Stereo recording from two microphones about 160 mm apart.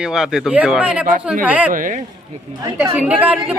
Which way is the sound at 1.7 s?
55° right (ahead or behind).